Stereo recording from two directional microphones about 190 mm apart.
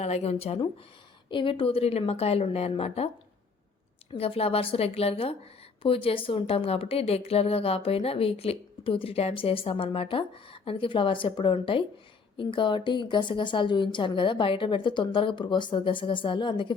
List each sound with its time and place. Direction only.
0.0 s speech: 35° left (ahead or behind)
4.1 s a woman's voice: 30° left (ahead or behind)